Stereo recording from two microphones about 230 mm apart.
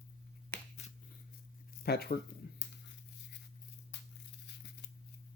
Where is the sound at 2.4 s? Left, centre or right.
Left.